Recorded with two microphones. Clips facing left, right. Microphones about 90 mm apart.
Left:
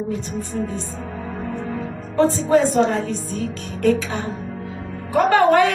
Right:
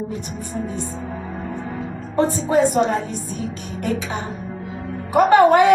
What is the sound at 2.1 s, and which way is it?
A child's voice, 15° right (ahead or behind).